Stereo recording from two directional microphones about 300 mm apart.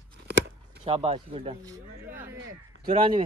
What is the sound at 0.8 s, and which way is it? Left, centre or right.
Speech, centre.